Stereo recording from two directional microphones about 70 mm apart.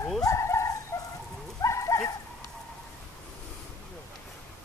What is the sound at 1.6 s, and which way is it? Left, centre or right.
Dog, left.